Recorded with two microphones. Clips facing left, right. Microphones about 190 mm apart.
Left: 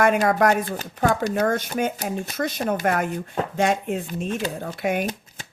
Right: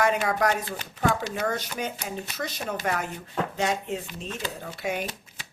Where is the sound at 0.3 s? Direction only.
50° left (ahead or behind).